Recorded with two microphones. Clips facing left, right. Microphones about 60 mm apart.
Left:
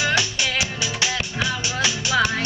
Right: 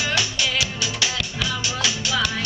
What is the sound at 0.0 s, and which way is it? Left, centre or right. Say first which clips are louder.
Music: left 2 dB; left.